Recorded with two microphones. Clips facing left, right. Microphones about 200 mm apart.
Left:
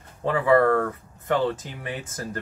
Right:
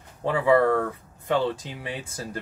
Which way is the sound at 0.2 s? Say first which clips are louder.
Left 1 dB; 15° right (ahead or behind).